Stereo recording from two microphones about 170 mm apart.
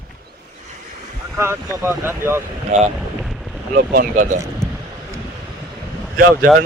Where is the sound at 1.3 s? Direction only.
15° right (ahead or behind).